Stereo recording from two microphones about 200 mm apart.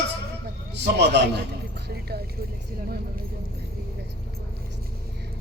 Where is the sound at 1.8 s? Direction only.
55° right (ahead or behind).